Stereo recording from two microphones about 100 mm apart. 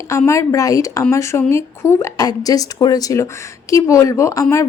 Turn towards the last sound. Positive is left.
turn(degrees=30)  # may be behind; listen again after turning